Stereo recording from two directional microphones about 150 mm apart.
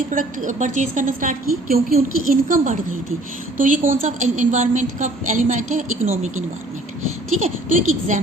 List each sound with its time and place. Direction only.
0.1 s a woman's voice: 60° right (ahead or behind)
7.3 s a woman's voice: 55° right (ahead or behind)